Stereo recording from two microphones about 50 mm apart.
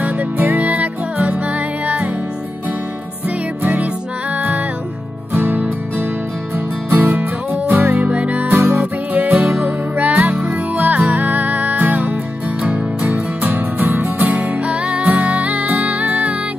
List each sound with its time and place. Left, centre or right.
0.0 s music: right
5.3 s music: right
12.6 s music: right
13.4 s music: right
14.2 s music: right